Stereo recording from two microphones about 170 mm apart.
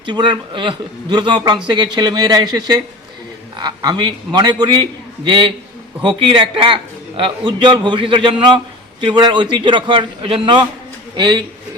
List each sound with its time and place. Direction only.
0.0 s a man's voice: 30° right (ahead or behind)